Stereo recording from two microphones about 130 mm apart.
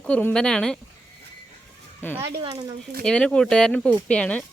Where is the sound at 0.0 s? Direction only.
10° left (ahead or behind).